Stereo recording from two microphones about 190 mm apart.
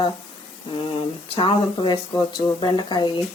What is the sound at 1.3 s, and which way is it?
Speech, 25° left (ahead or behind).